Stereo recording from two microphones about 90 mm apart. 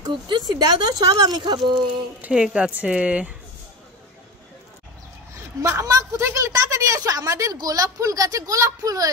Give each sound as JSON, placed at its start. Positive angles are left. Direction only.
{"t": 0.0, "sound": "speech", "side_deg": -50}
{"t": 2.2, "sound": "speech", "side_deg": -10}
{"t": 5.3, "sound": "speech", "side_deg": -35}